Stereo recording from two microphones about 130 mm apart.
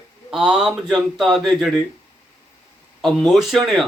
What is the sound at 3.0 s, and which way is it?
Speech, centre (ahead or behind).